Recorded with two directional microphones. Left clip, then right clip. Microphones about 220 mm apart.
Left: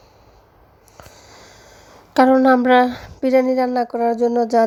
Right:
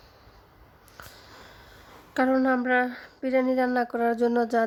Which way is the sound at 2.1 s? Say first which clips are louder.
Left 11 dB; 20° left (ahead or behind).